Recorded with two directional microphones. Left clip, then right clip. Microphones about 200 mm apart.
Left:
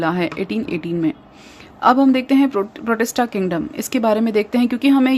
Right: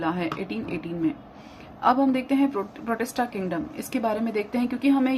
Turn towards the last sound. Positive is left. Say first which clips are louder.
# left 7 dB
turn(degrees=50)  # may be behind; listen again after turning